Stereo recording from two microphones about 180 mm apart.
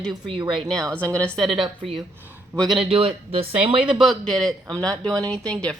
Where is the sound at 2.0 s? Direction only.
10° right (ahead or behind).